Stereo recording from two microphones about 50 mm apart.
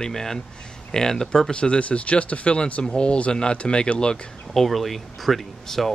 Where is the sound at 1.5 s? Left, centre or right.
Left.